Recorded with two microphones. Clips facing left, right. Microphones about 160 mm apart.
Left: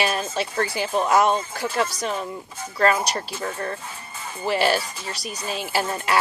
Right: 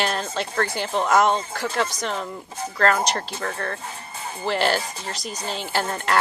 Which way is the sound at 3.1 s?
15° left (ahead or behind).